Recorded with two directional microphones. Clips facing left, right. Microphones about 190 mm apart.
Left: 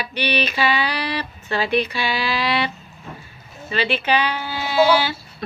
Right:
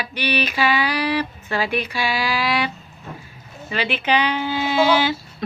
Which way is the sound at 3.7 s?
10° right (ahead or behind).